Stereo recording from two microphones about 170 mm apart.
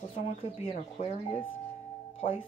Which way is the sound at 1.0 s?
45° left (ahead or behind).